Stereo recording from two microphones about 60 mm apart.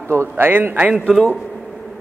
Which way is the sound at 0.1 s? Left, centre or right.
Right.